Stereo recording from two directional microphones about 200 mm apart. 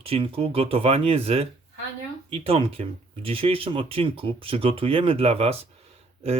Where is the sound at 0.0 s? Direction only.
30° right (ahead or behind).